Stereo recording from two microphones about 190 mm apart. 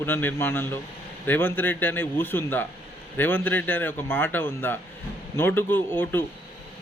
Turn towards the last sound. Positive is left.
turn(degrees=10)  # may be behind; listen again after turning